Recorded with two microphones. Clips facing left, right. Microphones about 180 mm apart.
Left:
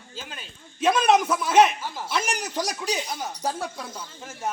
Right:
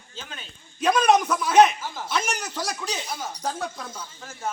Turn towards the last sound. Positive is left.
turn(degrees=20)  # may be behind; listen again after turning